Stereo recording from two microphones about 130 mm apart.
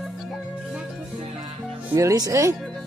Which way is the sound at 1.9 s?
25° right (ahead or behind).